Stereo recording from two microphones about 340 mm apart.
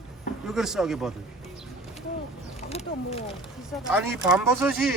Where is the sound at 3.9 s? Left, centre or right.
Centre.